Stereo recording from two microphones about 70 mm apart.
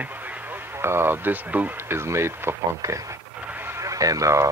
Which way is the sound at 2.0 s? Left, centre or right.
Right.